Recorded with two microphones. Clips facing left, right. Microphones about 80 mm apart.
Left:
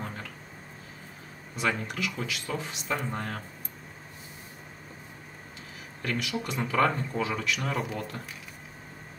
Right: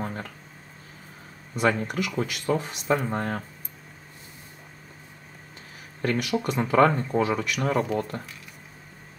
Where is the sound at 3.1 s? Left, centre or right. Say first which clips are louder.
Right 6 dB; right.